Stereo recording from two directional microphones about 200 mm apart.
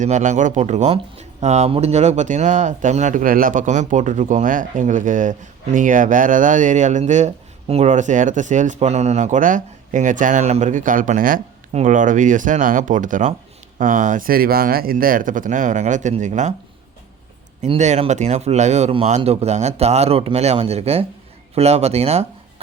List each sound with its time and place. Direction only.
0.0 s speech: 35° right (ahead or behind)
17.6 s speech: 35° right (ahead or behind)